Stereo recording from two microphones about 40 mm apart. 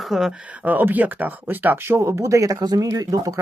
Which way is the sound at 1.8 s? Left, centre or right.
Right.